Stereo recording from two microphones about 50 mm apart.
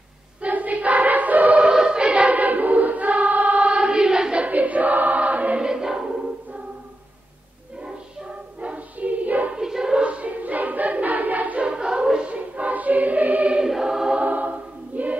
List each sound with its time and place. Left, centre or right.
0.4 s choir: right
1.6 s choir: centre; by 3.7 s right
3.7 s choir: centre
4.5 s choir: right
5.6 s choir: centre
8.5 s a sound: right
9.5 s a sound: centre
10.0 s choir: right
11.6 s choir: centre
12.4 s choir: right
13.6 s choir: centre
14.2 s choir: right